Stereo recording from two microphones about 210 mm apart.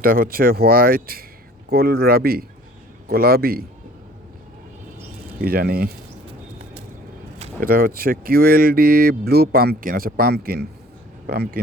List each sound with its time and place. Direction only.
0.0 s speech: 45° right (ahead or behind)
5.4 s speech: 45° right (ahead or behind)
7.6 s speech: 45° right (ahead or behind)